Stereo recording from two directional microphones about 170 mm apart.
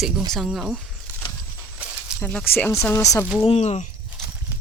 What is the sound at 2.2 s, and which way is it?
Speech, 10° left (ahead or behind).